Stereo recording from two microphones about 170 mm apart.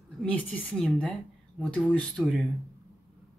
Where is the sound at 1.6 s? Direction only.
5° left (ahead or behind).